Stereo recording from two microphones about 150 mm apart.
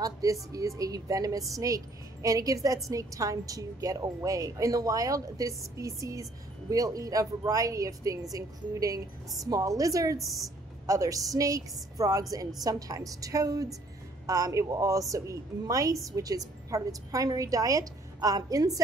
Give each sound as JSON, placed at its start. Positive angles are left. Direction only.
{"t": 0.0, "sound": "a woman's voice", "side_deg": -25}
{"t": 10.2, "sound": "a woman's voice", "side_deg": 0}
{"t": 10.9, "sound": "a woman's voice", "side_deg": -25}